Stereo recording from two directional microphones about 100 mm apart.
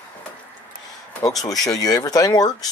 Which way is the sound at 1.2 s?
40° left (ahead or behind).